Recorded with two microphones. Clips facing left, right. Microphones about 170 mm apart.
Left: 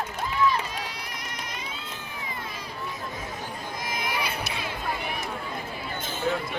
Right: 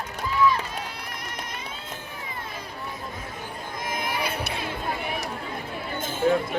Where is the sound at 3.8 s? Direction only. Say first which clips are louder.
Right 2 dB; 50° right (ahead or behind).